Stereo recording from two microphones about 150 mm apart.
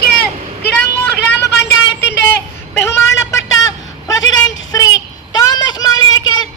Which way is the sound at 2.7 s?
15° left (ahead or behind).